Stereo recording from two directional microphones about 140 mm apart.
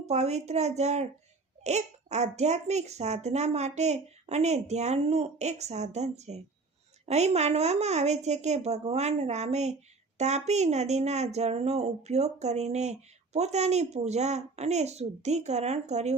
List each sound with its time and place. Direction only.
0.0 s speech: 50° right (ahead or behind)